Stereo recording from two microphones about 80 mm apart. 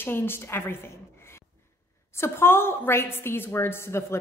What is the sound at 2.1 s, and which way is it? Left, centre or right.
A woman's voice, left.